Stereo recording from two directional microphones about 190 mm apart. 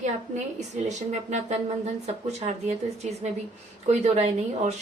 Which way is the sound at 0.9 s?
40° right (ahead or behind).